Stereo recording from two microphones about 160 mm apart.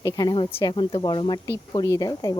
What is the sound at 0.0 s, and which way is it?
A woman's voice, 25° left (ahead or behind).